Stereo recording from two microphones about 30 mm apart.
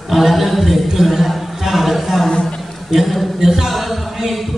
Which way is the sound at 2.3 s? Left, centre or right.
Left.